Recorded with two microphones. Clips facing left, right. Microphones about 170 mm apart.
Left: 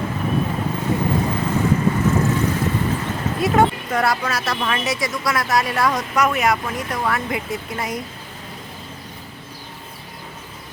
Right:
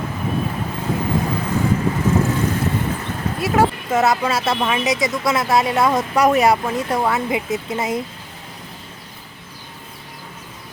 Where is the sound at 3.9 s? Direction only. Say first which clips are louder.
Right 3 dB; 25° right (ahead or behind).